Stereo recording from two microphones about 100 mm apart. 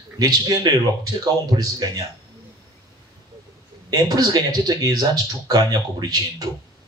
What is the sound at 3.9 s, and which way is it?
Speech, 40° right (ahead or behind).